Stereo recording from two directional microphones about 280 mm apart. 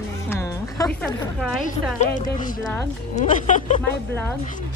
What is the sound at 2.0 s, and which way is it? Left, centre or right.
Speech, left.